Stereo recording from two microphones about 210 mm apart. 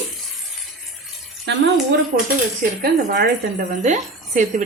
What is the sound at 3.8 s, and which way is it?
Speech, 35° right (ahead or behind).